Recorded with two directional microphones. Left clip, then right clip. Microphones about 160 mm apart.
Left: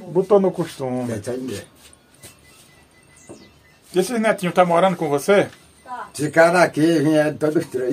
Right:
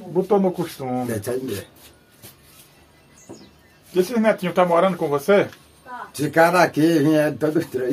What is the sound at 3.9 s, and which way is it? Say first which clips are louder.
Speech: even; 70° left (ahead or behind).